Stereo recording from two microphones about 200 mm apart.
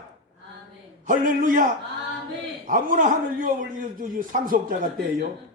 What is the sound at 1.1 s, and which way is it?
A man's voice, 40° right (ahead or behind).